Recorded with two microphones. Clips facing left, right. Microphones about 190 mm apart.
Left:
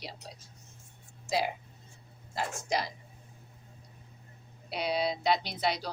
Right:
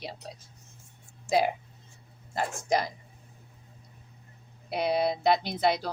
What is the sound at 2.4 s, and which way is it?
Speech, 50° right (ahead or behind).